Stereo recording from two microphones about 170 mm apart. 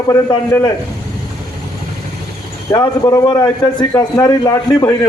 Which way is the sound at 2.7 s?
20° left (ahead or behind).